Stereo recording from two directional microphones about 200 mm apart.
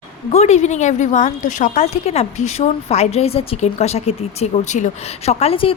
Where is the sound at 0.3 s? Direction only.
35° left (ahead or behind).